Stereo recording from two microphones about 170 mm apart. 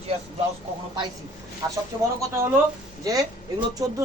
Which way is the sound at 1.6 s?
20° right (ahead or behind).